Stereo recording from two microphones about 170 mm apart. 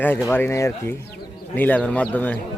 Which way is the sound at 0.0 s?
10° left (ahead or behind).